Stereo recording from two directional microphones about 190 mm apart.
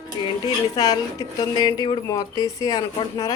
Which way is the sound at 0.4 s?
20° left (ahead or behind).